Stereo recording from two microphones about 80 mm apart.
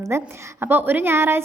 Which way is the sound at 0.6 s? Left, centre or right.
Right.